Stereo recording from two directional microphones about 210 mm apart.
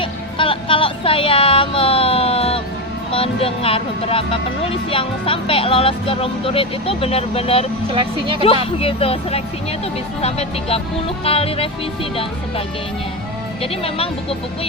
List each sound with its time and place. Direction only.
0.0 s music: 25° left (ahead or behind)
3.1 s speech: 25° left (ahead or behind)
7.9 s a woman's voice: 25° right (ahead or behind)
8.8 s speech: 25° left (ahead or behind)
13.6 s speech: 25° left (ahead or behind)